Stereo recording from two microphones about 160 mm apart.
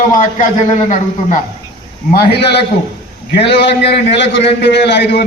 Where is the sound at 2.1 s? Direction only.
85° left.